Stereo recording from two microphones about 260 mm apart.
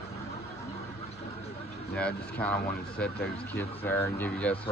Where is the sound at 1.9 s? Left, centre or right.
Centre.